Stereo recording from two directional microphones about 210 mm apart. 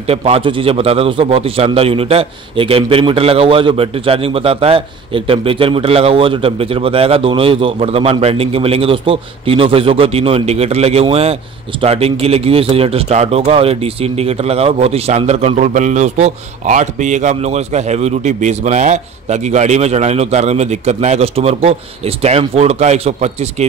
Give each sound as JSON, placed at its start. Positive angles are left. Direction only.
{"t": 0.0, "sound": "a man's voice", "side_deg": -30}